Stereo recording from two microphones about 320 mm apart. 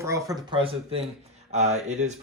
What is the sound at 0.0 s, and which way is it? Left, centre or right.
Speech, centre.